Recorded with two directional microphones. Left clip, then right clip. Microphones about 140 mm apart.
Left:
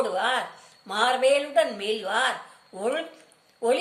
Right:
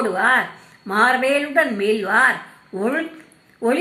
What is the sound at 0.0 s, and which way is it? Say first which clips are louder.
A woman's voice: right 8 dB; 10° left (ahead or behind).